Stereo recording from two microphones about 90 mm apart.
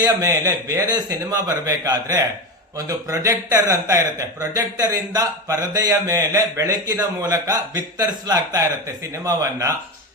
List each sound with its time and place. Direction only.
0.0 s speech: 40° right (ahead or behind)